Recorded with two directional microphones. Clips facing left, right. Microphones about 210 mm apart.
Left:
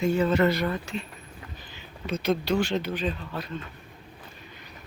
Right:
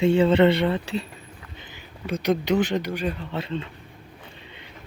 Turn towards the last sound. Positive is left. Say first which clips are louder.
# right 5 dB
turn(degrees=-25)  # may be behind; listen again after turning